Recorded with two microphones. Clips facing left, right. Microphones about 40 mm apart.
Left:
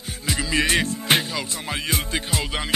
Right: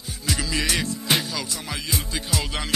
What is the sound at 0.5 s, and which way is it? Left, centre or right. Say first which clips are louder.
Music: left 6 dB; left.